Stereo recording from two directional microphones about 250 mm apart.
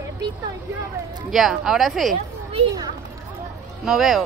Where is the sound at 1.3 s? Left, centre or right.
Centre.